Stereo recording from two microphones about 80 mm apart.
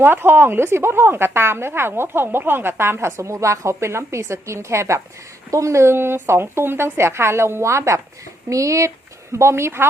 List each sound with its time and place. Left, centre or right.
0.0 s a woman's voice: right